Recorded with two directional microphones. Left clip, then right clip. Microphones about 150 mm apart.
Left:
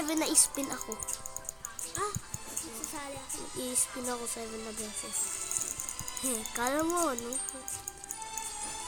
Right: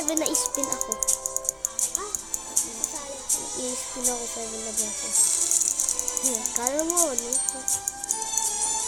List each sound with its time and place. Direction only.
0.1 s speech: 10° left (ahead or behind)
1.6 s music: 55° right (ahead or behind)
5.2 s music: 55° right (ahead or behind)
6.5 s speech: 10° left (ahead or behind)